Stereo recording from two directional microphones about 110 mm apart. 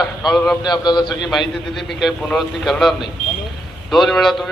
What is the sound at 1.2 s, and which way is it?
A man's voice, centre (ahead or behind).